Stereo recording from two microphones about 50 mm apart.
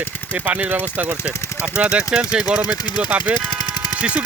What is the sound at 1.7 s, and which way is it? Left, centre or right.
Speech, right.